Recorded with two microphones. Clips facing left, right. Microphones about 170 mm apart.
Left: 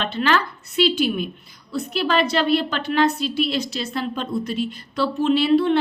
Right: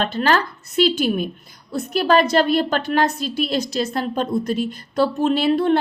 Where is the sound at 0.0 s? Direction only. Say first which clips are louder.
Right 2 dB; 40° right (ahead or behind).